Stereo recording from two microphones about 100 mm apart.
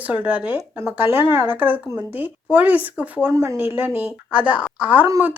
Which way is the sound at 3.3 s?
35° right (ahead or behind).